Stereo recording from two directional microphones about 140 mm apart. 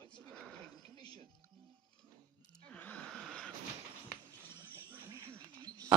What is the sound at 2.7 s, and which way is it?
Sigh, 10° left (ahead or behind).